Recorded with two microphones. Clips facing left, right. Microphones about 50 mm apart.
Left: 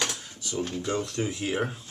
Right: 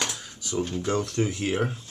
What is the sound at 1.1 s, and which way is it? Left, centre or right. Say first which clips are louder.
Speech: right 3 dB; right.